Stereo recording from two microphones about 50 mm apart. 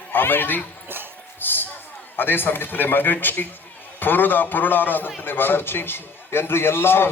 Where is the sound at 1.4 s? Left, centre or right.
Left.